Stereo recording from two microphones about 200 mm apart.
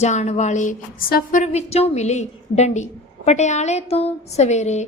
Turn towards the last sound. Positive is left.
turn(degrees=35)  # may be behind; listen again after turning